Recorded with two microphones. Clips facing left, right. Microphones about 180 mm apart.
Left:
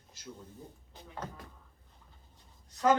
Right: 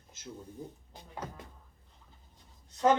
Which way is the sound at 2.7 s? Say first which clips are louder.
Right 1 dB; 25° right (ahead or behind).